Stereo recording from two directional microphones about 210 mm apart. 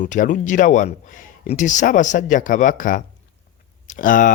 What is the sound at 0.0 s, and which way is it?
Speech, 35° left (ahead or behind).